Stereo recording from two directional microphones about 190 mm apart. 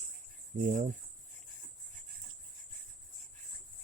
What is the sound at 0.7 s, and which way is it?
Speech, 45° right (ahead or behind).